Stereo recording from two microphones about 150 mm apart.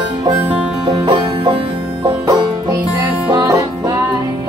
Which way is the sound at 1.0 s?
30° right (ahead or behind).